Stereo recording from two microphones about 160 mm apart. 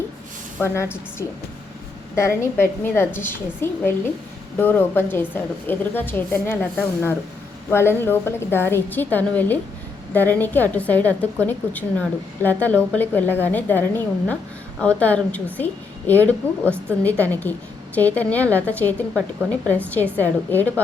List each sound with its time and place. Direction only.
0.6 s a woman's voice: 15° left (ahead or behind)
2.1 s a woman's voice: 15° left (ahead or behind)